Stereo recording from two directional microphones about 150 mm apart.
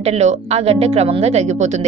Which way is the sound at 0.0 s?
45° right (ahead or behind).